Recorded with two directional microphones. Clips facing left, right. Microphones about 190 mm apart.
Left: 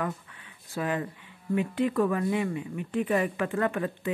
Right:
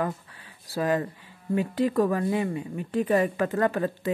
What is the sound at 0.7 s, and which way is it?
Speech, 40° right (ahead or behind).